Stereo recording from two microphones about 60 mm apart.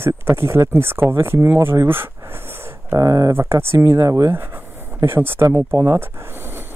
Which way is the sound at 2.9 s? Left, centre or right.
Right.